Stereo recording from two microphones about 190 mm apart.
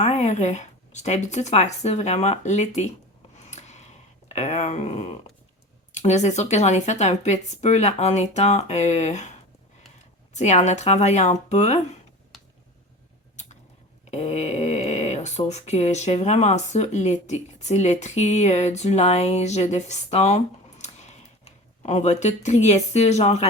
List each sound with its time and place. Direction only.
0.0 s speech: 35° left (ahead or behind)
3.3 s a sound: 35° left (ahead or behind)
4.3 s speech: 35° left (ahead or behind)
10.3 s speech: 35° left (ahead or behind)
14.1 s speech: 35° left (ahead or behind)